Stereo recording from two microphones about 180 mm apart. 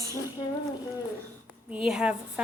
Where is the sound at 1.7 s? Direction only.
5° right (ahead or behind).